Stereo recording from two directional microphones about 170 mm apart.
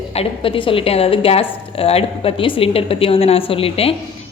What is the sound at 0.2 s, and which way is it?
A woman's voice, 30° left (ahead or behind).